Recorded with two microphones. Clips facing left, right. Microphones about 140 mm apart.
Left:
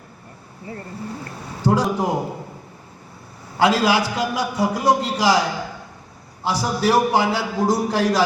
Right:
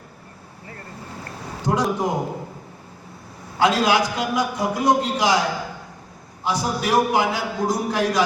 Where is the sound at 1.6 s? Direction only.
30° left (ahead or behind).